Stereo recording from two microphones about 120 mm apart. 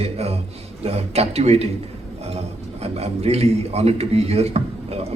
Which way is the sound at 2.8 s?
60° right (ahead or behind).